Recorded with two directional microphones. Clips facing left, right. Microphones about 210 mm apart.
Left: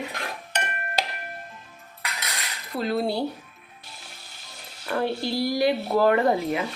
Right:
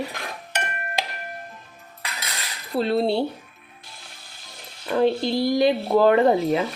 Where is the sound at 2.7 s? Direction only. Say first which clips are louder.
Right 4 dB; 30° right (ahead or behind).